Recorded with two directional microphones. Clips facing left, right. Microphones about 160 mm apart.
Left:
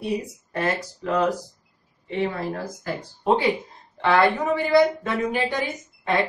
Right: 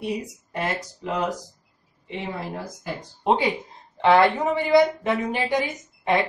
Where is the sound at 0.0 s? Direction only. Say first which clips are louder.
Left 2 dB; 20° right (ahead or behind).